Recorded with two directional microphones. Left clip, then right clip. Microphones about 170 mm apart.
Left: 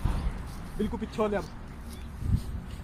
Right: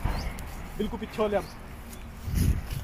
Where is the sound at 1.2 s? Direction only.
40° right (ahead or behind).